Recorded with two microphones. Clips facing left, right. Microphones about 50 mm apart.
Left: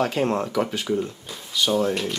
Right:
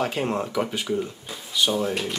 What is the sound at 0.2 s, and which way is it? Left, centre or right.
Speech, centre.